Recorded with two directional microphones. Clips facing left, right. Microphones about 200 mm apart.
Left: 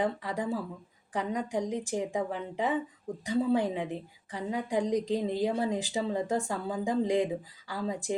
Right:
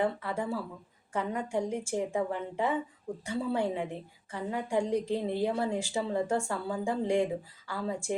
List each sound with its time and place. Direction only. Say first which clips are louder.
0.0 s a woman's voice: even; 15° left (ahead or behind)